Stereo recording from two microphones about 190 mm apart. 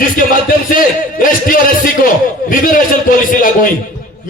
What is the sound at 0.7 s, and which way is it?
A man's voice, 45° left (ahead or behind).